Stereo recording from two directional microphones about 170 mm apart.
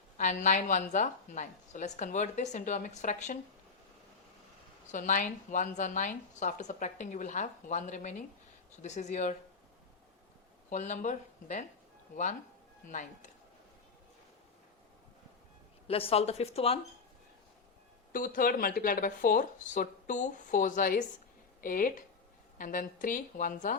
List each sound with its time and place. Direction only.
0.2 s a woman's voice: 45° left (ahead or behind)
4.9 s a woman's voice: 50° left (ahead or behind)
10.7 s speech: 45° left (ahead or behind)
12.9 s a woman's voice: 45° left (ahead or behind)
15.9 s a woman's voice: 35° left (ahead or behind)
18.1 s a woman's voice: 55° left (ahead or behind)